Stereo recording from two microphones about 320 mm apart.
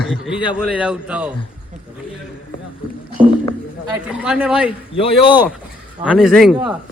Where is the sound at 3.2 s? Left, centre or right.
Centre.